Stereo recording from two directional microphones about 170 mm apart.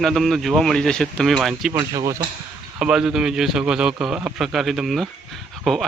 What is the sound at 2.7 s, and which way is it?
A man's voice, 5° right (ahead or behind).